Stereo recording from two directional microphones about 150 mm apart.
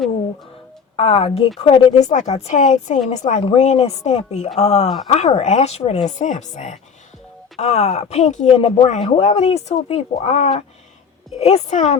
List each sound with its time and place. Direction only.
0.9 s speech: 40° left (ahead or behind)